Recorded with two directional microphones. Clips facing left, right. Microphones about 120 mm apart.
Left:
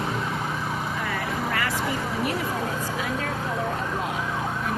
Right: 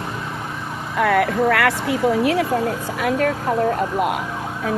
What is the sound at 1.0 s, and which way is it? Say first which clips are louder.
Speech: right 11 dB; 70° right (ahead or behind).